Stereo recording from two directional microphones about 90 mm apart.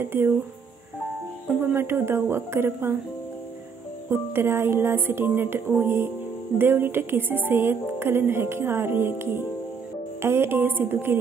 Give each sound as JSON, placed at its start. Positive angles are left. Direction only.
{"t": 0.0, "sound": "music", "side_deg": -25}
{"t": 1.5, "sound": "music", "side_deg": -25}
{"t": 4.1, "sound": "music", "side_deg": -25}